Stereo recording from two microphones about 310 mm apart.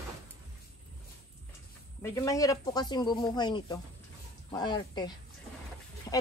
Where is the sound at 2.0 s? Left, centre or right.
Centre.